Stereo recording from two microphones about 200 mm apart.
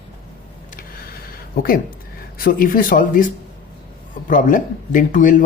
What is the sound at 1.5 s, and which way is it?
Speech, 45° left (ahead or behind).